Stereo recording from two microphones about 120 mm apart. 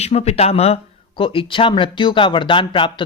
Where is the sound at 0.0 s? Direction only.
60° left (ahead or behind).